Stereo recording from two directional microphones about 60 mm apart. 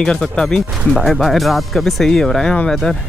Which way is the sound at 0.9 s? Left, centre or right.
Centre.